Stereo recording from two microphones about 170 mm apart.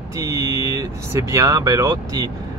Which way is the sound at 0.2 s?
20° right (ahead or behind).